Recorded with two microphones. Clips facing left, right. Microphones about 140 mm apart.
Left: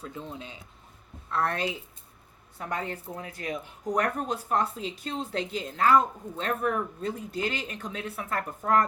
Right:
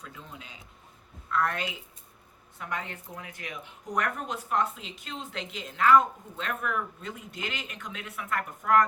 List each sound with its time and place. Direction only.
0.0 s speech: 30° left (ahead or behind)